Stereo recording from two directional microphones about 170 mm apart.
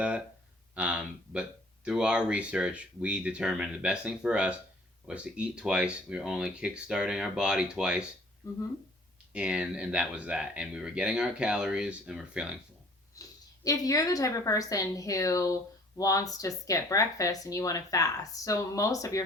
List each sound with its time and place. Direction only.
0.8 s speech: 5° right (ahead or behind)
8.4 s speech: 20° left (ahead or behind)
9.3 s speech: 5° right (ahead or behind)
13.2 s a sound: 20° left (ahead or behind)
13.7 s speech: 20° left (ahead or behind)